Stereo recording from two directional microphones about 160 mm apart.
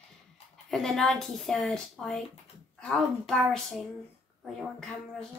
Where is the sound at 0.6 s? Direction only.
Centre (ahead or behind).